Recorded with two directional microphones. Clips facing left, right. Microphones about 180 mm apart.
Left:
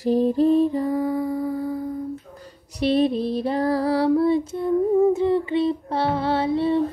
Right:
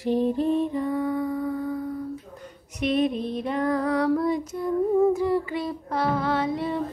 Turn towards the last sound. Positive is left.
turn(degrees=30)  # may be behind; listen again after turning